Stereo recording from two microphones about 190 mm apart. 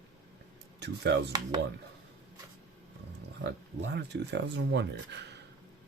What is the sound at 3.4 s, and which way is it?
Speech, 65° right (ahead or behind).